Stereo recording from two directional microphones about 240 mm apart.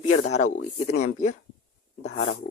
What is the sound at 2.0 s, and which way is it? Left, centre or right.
Speech, left.